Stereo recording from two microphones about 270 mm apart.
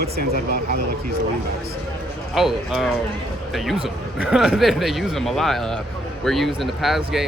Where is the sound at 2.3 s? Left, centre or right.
Centre.